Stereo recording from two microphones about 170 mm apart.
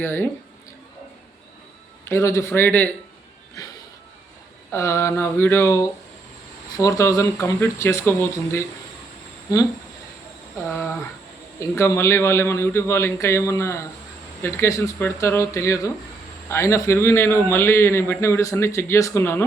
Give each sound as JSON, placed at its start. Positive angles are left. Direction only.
{"t": 0.0, "sound": "a man's voice", "side_deg": 10}
{"t": 2.0, "sound": "a man's voice", "side_deg": 15}
{"t": 4.7, "sound": "a man's voice", "side_deg": 15}
{"t": 11.7, "sound": "a man's voice", "side_deg": 15}